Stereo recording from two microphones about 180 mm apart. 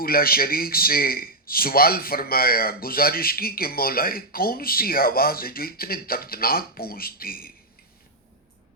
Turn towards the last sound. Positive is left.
turn(degrees=55)  # may be behind; listen again after turning